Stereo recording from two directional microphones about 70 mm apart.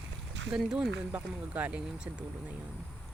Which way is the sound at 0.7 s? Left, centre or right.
Centre.